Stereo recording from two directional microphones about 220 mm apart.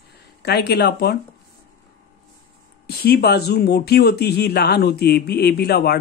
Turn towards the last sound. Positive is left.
turn(degrees=45)  # may be behind; listen again after turning